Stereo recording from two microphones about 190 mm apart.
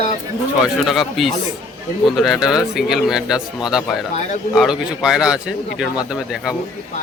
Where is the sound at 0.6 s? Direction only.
Centre (ahead or behind).